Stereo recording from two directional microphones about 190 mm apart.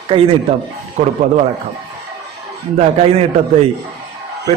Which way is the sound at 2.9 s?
30° right (ahead or behind).